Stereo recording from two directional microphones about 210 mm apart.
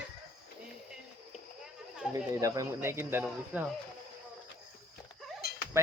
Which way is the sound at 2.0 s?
5° right (ahead or behind).